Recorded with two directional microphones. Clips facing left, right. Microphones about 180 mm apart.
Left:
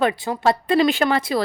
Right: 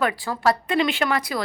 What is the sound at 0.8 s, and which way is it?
Speech, 35° left (ahead or behind).